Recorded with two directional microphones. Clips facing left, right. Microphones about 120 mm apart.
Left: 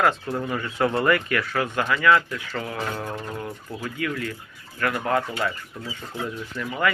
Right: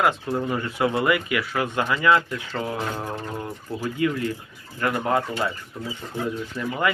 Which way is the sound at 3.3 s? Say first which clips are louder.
Right 2 dB; 10° right (ahead or behind).